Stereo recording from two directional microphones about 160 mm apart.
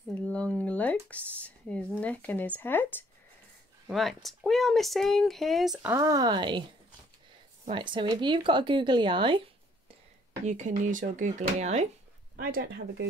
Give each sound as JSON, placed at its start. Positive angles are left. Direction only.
{"t": 0.1, "sound": "speech", "side_deg": 10}
{"t": 3.9, "sound": "speech", "side_deg": 0}
{"t": 5.8, "sound": "speech", "side_deg": -15}
{"t": 7.7, "sound": "speech", "side_deg": -30}
{"t": 10.4, "sound": "speech", "side_deg": -45}
{"t": 12.4, "sound": "speech", "side_deg": -65}